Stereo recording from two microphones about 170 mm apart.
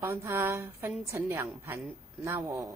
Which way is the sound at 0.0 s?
15° right (ahead or behind).